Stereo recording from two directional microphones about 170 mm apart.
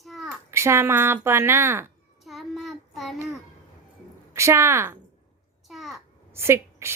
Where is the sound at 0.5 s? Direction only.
15° right (ahead or behind).